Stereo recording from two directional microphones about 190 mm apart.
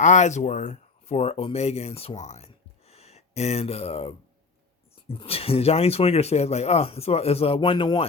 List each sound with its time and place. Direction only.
0.0 s speech: 40° left (ahead or behind)